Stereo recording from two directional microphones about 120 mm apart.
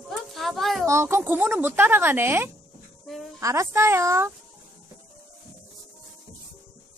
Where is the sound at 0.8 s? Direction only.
20° right (ahead or behind).